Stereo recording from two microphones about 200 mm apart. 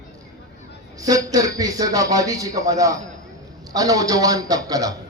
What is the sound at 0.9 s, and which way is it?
A man's voice, 15° right (ahead or behind).